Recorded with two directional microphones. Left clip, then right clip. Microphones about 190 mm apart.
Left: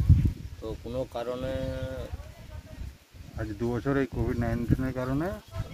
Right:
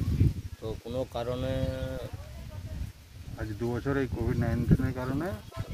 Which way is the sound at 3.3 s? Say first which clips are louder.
Left 2 dB; 60° left (ahead or behind).